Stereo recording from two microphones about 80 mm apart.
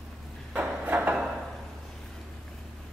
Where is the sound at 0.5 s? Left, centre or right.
Right.